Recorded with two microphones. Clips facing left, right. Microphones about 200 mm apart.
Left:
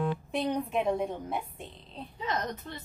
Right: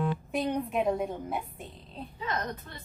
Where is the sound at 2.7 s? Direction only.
20° left (ahead or behind).